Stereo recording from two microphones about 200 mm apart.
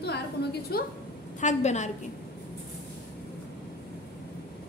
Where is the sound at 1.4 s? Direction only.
35° left (ahead or behind).